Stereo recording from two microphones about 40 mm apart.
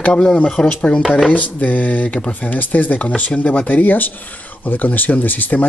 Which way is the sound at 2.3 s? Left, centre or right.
Left.